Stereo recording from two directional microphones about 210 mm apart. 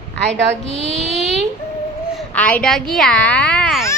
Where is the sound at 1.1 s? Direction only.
Centre (ahead or behind).